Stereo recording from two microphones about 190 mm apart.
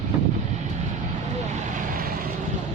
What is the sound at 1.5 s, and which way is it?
Vehicle, 45° right (ahead or behind).